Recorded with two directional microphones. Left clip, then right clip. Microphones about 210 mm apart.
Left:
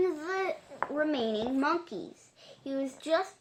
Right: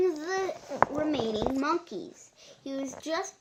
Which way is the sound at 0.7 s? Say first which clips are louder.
Right 10 dB; 55° right (ahead or behind).